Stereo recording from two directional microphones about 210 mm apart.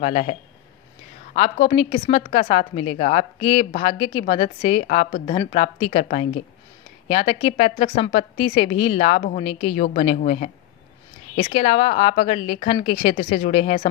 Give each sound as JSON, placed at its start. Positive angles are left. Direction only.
{"t": 0.0, "sound": "a woman's voice", "side_deg": 30}
{"t": 13.0, "sound": "a woman's voice", "side_deg": 40}